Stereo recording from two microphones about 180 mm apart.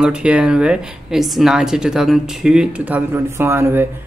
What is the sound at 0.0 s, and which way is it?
Speech, 5° right (ahead or behind).